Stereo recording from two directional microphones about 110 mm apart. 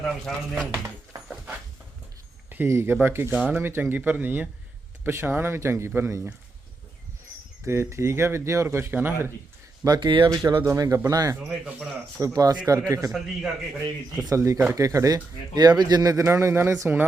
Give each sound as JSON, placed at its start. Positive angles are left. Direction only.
{"t": 0.0, "sound": "speech", "side_deg": 0}
{"t": 2.5, "sound": "speech", "side_deg": -20}
{"t": 7.6, "sound": "speech", "side_deg": -25}
{"t": 9.8, "sound": "speech", "side_deg": -40}
{"t": 10.2, "sound": "speech", "side_deg": -30}
{"t": 11.3, "sound": "speech", "side_deg": -5}
{"t": 12.2, "sound": "speech", "side_deg": -35}
{"t": 13.1, "sound": "speech", "side_deg": 0}
{"t": 14.3, "sound": "speech", "side_deg": -30}